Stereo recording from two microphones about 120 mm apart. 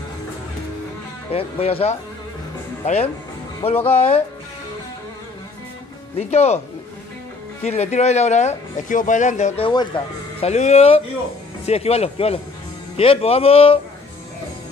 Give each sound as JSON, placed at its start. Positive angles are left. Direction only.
{"t": 1.3, "sound": "speech", "side_deg": 55}
{"t": 6.1, "sound": "speech", "side_deg": 65}
{"t": 7.6, "sound": "speech", "side_deg": 60}
{"t": 9.6, "sound": "speech", "side_deg": 40}
{"t": 10.4, "sound": "speech", "side_deg": 70}